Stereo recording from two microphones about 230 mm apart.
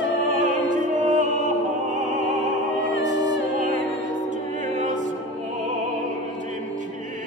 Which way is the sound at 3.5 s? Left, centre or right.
Right.